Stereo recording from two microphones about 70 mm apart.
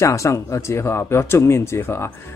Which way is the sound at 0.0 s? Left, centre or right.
Left.